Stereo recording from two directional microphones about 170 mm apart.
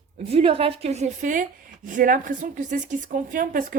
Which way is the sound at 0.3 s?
35° right (ahead or behind).